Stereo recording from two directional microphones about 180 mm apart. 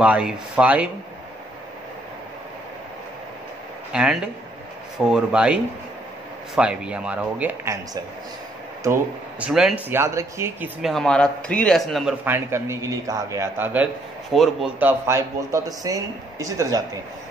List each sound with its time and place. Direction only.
0.0 s speech: 5° right (ahead or behind)
3.9 s a man's voice: 5° right (ahead or behind)
10.8 s a man's voice: centre (ahead or behind)
12.3 s speech: 15° right (ahead or behind)
14.3 s a man's voice: centre (ahead or behind)
14.8 s speech: 15° right (ahead or behind)